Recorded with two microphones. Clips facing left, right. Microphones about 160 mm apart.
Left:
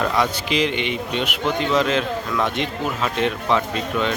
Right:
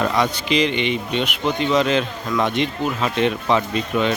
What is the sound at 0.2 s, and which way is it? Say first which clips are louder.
Speech: right 1 dB; 5° left (ahead or behind).